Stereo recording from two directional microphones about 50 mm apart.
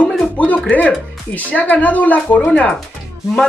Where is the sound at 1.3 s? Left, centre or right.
Left.